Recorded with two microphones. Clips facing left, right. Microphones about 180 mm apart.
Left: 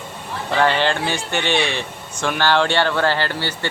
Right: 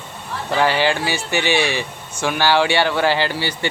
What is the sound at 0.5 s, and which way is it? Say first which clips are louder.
Speech: even; 5° right (ahead or behind).